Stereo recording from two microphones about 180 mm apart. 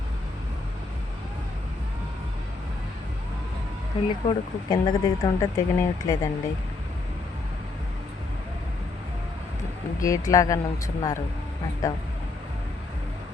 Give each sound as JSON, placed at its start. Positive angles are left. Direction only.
{"t": 4.1, "sound": "speech", "side_deg": 25}
{"t": 10.0, "sound": "speech", "side_deg": 20}